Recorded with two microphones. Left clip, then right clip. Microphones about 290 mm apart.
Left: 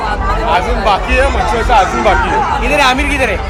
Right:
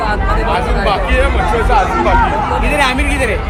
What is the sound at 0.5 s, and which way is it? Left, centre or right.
Speech, left.